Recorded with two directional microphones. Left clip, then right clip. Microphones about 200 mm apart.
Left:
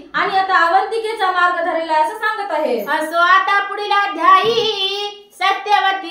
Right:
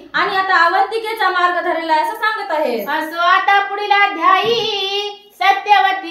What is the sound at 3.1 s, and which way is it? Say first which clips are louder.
Child singing: even; 20° left (ahead or behind).